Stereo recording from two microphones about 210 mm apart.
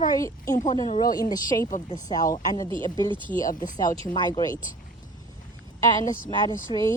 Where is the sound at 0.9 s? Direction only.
35° left (ahead or behind).